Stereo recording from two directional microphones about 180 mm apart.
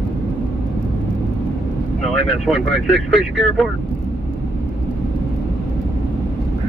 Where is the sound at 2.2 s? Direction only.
Centre (ahead or behind).